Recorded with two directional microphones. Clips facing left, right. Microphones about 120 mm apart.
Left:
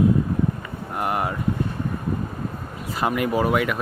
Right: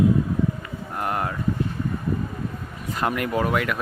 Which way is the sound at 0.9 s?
10° left (ahead or behind).